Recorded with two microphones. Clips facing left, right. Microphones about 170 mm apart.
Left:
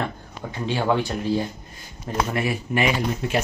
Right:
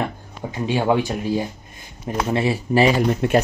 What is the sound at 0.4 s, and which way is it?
Speech, 15° right (ahead or behind).